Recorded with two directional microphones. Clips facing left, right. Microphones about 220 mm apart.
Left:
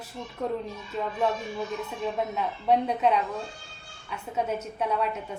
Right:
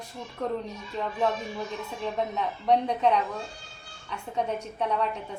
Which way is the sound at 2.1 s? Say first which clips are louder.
Even; 5° left (ahead or behind).